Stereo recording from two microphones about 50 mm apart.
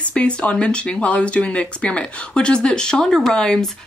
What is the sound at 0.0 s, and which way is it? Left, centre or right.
Speech, left.